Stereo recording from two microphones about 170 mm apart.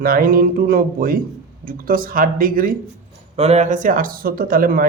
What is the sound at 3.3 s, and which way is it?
A man's voice, 40° right (ahead or behind).